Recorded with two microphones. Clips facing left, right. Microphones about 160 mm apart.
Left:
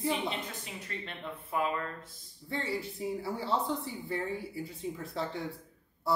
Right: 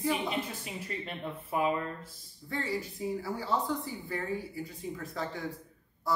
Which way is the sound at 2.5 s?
25° left (ahead or behind).